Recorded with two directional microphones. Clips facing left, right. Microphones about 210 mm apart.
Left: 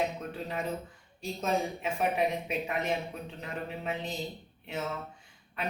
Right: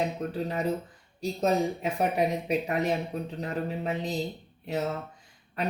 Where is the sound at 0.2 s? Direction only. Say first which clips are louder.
Right 6 dB; 40° right (ahead or behind).